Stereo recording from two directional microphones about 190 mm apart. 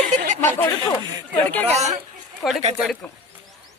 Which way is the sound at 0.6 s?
15° left (ahead or behind).